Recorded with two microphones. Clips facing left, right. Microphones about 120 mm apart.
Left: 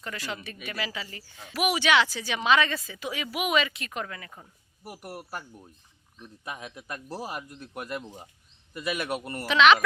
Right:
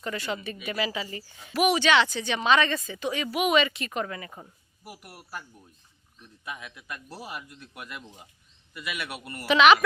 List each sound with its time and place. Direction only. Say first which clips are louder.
0.0 s speech: right 4 dB; centre (ahead or behind)
4.9 s speech: left 4 dB; 45° left (ahead or behind)
9.5 s speech: right 1 dB; 5° right (ahead or behind)